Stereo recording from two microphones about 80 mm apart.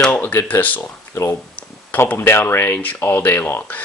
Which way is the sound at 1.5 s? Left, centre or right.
Left.